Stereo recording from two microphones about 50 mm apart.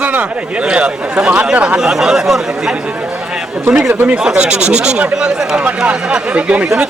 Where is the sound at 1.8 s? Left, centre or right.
Centre; by 6.7 s right.